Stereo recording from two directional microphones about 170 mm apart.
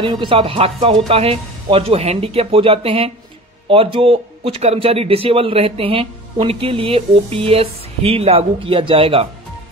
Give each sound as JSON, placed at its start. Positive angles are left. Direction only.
{"t": 0.0, "sound": "a man's voice", "side_deg": -30}